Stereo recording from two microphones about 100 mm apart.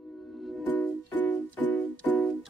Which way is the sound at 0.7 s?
15° left (ahead or behind).